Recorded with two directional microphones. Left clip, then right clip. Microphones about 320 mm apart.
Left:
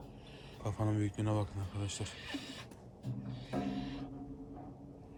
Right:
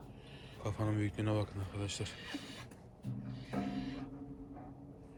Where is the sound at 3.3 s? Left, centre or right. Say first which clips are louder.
Left 2 dB; left.